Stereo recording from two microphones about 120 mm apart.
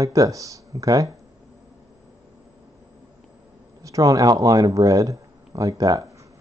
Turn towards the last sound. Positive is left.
turn(degrees=-30)  # may be behind; listen again after turning